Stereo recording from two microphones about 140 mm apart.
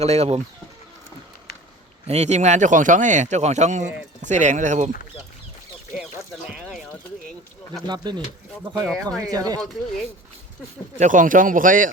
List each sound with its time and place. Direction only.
0.0 s speech: 50° right (ahead or behind)
2.0 s speech: 55° right (ahead or behind)
6.5 s a sound: 5° right (ahead or behind)
7.9 s speech: 30° right (ahead or behind)
8.9 s speech: 5° left (ahead or behind)
9.2 s speech: 25° right (ahead or behind)
10.9 s speech: 65° right (ahead or behind)